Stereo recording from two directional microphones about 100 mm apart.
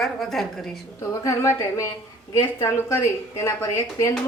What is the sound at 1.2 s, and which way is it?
A woman's voice, 30° left (ahead or behind).